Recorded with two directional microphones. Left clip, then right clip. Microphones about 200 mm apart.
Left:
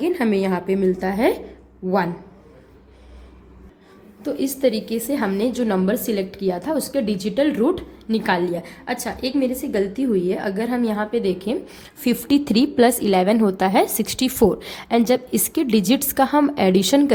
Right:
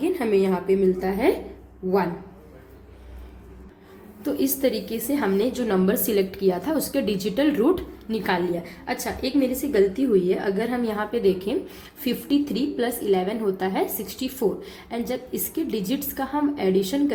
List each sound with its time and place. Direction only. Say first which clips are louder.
0.0 s a woman's voice: left 1 dB; 35° left (ahead or behind)
4.2 s a woman's voice: left 3 dB; 15° left (ahead or behind)
12.0 s a woman's voice: left 4 dB; 35° left (ahead or behind)